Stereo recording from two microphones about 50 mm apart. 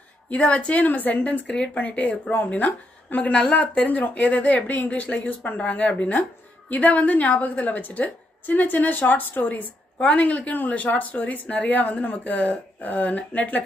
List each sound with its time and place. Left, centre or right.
0.3 s a woman's voice: left
2.3 s speech: left
2.6 s a woman's voice: left